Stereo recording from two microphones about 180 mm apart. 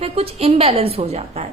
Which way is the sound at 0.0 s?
35° right (ahead or behind).